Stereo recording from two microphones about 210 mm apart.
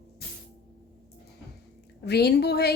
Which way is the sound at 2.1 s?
50° left (ahead or behind).